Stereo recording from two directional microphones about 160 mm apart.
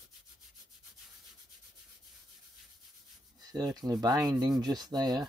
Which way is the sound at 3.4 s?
25° right (ahead or behind).